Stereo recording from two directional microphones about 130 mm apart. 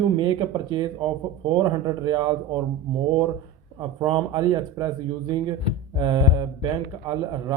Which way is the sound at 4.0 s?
30° right (ahead or behind).